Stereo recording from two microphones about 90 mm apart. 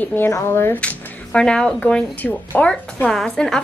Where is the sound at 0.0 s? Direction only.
25° left (ahead or behind).